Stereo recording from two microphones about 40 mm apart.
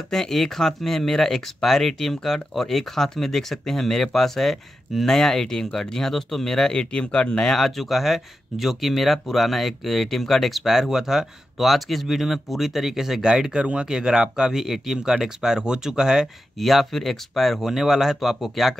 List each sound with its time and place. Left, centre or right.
0.1 s speech: centre
7.5 s speech: centre
10.6 s speech: centre
13.3 s speech: centre
16.5 s speech: centre